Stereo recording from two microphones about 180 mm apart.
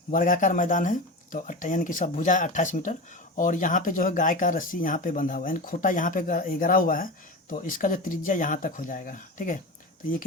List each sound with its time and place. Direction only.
0.1 s speech: 50° left (ahead or behind)